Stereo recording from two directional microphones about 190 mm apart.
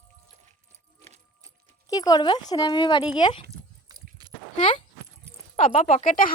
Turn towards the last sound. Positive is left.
turn(degrees=45)  # may be behind; listen again after turning